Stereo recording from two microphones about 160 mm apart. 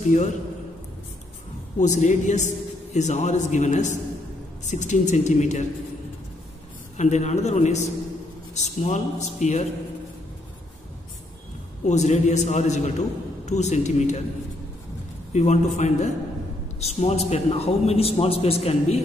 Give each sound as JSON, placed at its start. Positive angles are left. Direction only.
{"t": 0.0, "sound": "a man's voice", "side_deg": 50}
{"t": 1.8, "sound": "a man's voice", "side_deg": 50}
{"t": 7.0, "sound": "a man's voice", "side_deg": 45}
{"t": 11.8, "sound": "a man's voice", "side_deg": 45}
{"t": 15.3, "sound": "a man's voice", "side_deg": 45}